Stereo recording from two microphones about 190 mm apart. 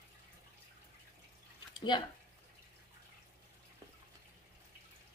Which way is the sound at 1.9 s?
25° left (ahead or behind).